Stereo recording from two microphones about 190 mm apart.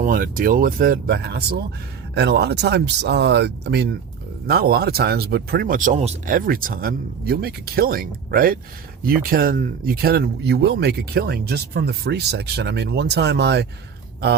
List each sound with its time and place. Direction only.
0.0 s speech: 45° right (ahead or behind); by 13.7 s 65° right (ahead or behind)